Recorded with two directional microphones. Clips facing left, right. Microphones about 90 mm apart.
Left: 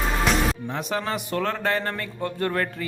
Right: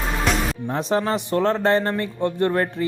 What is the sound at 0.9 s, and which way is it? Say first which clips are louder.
Speech: right 7 dB; 30° right (ahead or behind).